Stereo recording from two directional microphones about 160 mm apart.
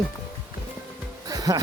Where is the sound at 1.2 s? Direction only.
25° right (ahead or behind).